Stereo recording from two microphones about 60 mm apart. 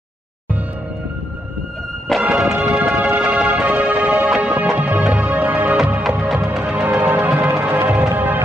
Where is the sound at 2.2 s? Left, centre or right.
Right.